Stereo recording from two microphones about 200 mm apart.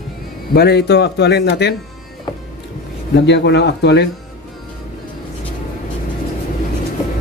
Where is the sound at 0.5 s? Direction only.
55° left (ahead or behind).